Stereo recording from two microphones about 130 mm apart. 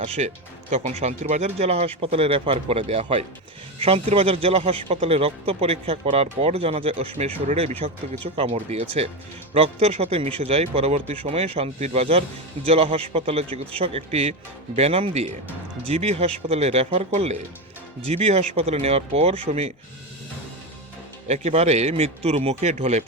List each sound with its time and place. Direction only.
0.0 s a man's voice: 50° right (ahead or behind)
21.2 s speech: 55° right (ahead or behind)